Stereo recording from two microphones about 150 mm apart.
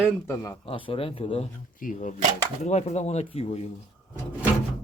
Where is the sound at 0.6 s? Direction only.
35° left (ahead or behind).